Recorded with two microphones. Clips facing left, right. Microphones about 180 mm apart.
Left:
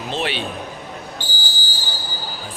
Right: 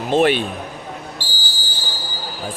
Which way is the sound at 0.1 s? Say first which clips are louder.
Right 10 dB; 50° right (ahead or behind).